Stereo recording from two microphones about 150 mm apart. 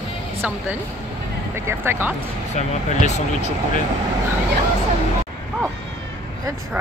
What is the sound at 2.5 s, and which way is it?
Speech, 50° left (ahead or behind).